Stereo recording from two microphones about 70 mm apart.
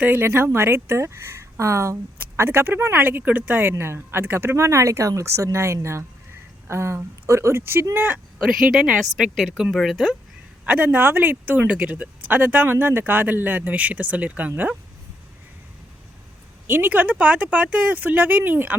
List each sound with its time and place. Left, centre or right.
0.0 s speech: right
0.3 s speech: right
7.9 s speech: right
8.4 s speech: centre
9.3 s speech: centre
10.7 s speech: right
16.6 s speech: right